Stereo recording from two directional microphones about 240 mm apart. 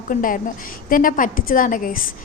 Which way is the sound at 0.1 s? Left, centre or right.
Left.